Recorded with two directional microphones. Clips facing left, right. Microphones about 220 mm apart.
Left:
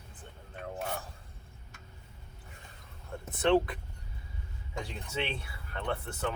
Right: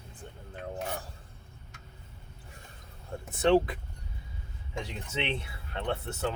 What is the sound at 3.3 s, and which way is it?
Speech, 25° right (ahead or behind).